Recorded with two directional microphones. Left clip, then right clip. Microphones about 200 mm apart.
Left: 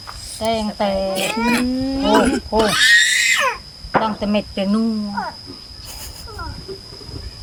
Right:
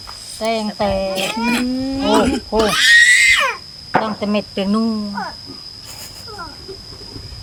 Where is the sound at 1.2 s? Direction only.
10° left (ahead or behind).